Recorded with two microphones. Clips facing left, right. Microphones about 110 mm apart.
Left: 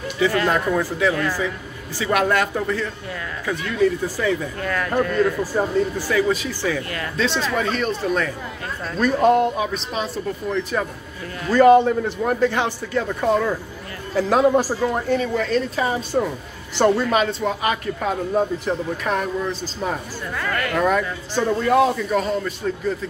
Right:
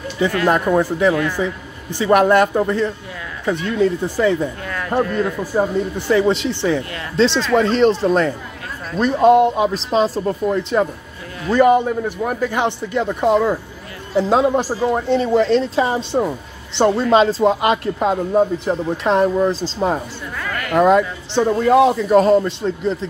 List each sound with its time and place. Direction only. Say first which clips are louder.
0.5 s a man's voice: right 5 dB; 20° right (ahead or behind)
10.5 s a man's voice: right 3 dB; 25° right (ahead or behind)
15.0 s speech: right 6 dB; 25° right (ahead or behind)
20.4 s a sound: left 2 dB; 5° right (ahead or behind)
20.7 s speech: right 8 dB; 20° right (ahead or behind)
22.1 s speech: right 9 dB; 40° right (ahead or behind)
22.4 s speech: right 4 dB; 25° right (ahead or behind)